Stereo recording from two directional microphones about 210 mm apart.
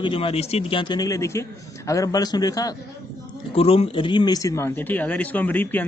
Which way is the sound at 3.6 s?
25° left (ahead or behind).